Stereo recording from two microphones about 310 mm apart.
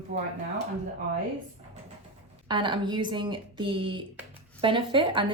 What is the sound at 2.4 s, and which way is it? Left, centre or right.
Speech, centre.